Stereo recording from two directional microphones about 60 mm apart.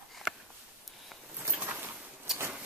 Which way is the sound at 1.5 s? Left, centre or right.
Right.